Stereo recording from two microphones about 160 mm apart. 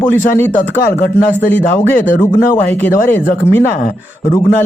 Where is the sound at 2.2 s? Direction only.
15° left (ahead or behind).